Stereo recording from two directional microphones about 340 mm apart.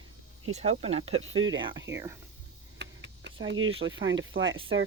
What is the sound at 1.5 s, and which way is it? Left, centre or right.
Speech, centre.